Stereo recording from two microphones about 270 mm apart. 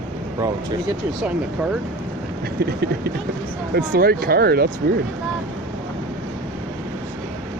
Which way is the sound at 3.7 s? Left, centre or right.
Right.